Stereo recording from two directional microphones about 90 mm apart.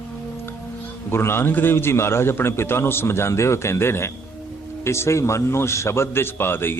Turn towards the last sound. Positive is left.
turn(degrees=25)  # may be behind; listen again after turning